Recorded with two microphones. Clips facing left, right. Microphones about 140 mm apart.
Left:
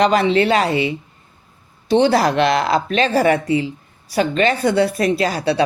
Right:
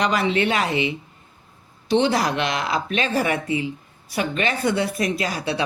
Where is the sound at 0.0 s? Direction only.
30° left (ahead or behind).